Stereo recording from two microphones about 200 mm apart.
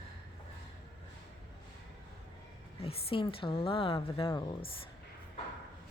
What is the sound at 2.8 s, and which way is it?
Speech, 25° left (ahead or behind).